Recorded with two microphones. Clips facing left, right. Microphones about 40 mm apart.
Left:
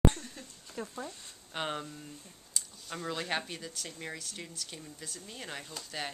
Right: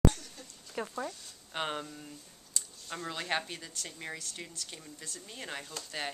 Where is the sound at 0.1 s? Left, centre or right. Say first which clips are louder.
Left 2 dB; left.